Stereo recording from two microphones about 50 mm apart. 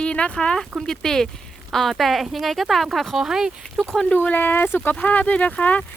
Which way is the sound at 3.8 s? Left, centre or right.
Centre.